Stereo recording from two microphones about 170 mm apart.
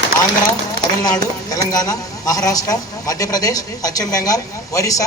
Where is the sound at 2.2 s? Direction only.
20° left (ahead or behind).